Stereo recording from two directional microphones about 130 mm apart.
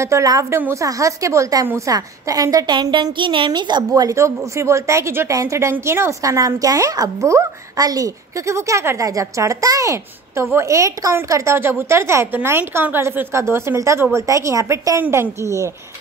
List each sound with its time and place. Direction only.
0.0 s a woman's voice: 25° right (ahead or behind)